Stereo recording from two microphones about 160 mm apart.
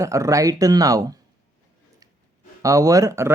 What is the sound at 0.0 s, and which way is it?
Speech, 20° right (ahead or behind).